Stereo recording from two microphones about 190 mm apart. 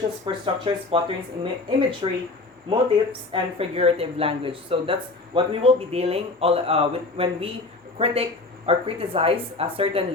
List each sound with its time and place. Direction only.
0.3 s speech: 25° right (ahead or behind)
2.0 s speech: 30° right (ahead or behind)